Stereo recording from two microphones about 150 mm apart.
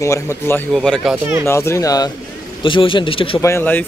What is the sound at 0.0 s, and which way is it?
Speech, 20° left (ahead or behind).